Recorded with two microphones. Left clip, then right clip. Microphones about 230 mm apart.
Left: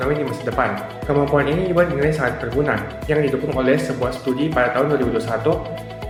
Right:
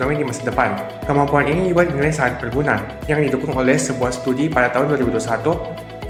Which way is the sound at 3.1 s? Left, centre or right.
Right.